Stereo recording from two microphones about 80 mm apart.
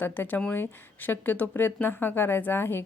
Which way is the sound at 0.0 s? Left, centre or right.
Left.